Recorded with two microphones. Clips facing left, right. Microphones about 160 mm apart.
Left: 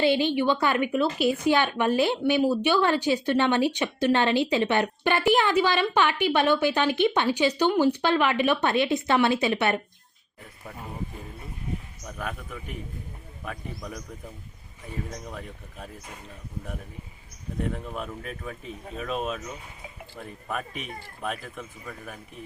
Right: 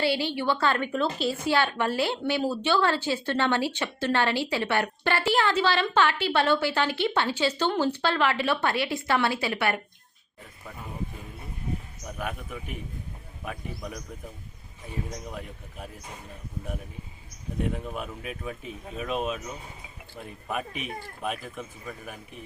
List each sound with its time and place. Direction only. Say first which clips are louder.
0.0 s a woman's voice: left 4 dB; 20° left (ahead or behind)
12.0 s speech: right 2 dB; 10° right (ahead or behind)
15.3 s speech: even; 15° right (ahead or behind)
17.9 s speech: left 1 dB; 10° right (ahead or behind)